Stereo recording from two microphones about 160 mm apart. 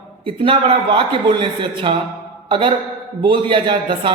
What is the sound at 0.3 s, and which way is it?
A woman's voice, 35° right (ahead or behind).